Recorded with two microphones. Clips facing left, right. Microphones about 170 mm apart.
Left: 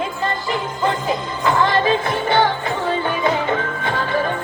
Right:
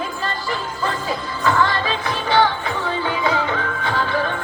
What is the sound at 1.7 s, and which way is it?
Music, 50° left (ahead or behind).